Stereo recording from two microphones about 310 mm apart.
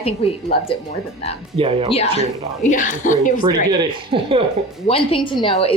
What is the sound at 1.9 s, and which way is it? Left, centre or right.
A woman's voice, centre.